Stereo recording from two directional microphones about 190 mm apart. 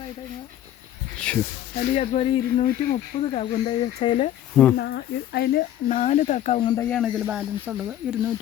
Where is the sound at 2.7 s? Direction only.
45° left (ahead or behind).